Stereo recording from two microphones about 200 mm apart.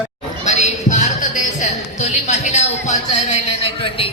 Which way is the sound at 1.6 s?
35° left (ahead or behind).